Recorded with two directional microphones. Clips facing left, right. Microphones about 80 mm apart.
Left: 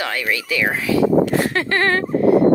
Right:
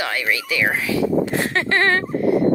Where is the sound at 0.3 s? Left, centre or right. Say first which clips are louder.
Even; right.